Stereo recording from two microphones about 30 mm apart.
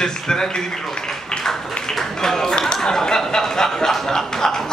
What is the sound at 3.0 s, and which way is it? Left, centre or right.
Speech, left.